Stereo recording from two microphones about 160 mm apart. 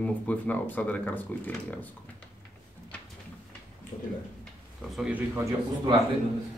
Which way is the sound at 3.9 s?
45° left (ahead or behind).